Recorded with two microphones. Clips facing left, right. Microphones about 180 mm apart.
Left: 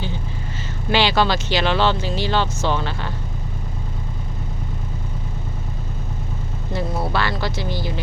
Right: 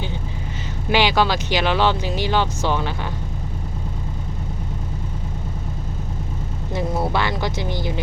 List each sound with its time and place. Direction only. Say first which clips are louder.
0.9 s speech: even; 10° right (ahead or behind)
6.7 s speech: right 1 dB; 20° right (ahead or behind)